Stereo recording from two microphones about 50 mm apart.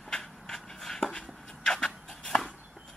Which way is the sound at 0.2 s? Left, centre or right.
Centre.